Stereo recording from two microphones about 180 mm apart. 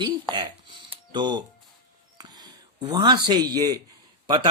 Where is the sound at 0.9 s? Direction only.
25° right (ahead or behind).